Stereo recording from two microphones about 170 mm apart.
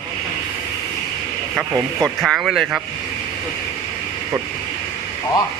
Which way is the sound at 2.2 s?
Centre (ahead or behind).